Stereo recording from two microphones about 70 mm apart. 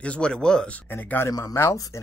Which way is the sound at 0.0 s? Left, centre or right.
Centre.